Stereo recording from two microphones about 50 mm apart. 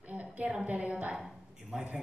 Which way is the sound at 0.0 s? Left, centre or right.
Right.